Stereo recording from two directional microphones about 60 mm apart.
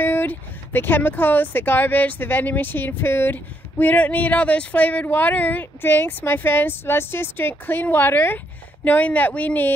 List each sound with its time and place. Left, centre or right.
0.0 s speech: left